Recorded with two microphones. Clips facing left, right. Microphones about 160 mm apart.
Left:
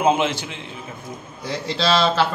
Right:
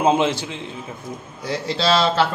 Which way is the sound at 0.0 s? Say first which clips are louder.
Right 1 dB; 30° right (ahead or behind).